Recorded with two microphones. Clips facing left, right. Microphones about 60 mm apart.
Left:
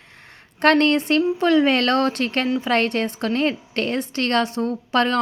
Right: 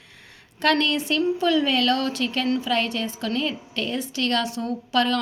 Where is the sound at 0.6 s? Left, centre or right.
Left.